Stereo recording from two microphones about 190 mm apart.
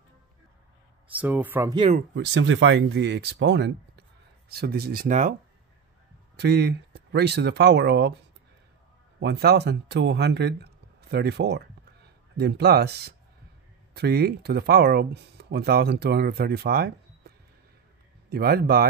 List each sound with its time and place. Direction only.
1.1 s speech: 10° right (ahead or behind)
2.1 s speech: 80° right; by 3.7 s 65° right (ahead or behind)
4.5 s speech: 55° right (ahead or behind)
6.3 s speech: 60° right (ahead or behind)
9.2 s speech: 60° right (ahead or behind)
18.3 s speech: 55° right (ahead or behind)